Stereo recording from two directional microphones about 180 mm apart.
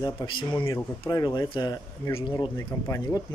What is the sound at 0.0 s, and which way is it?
Speech, 25° left (ahead or behind).